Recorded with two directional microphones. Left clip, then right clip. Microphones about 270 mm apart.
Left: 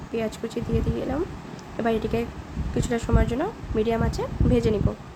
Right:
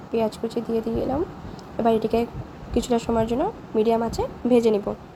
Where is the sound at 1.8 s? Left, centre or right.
Centre.